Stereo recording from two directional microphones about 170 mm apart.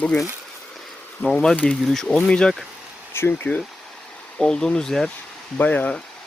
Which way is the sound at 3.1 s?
15° left (ahead or behind).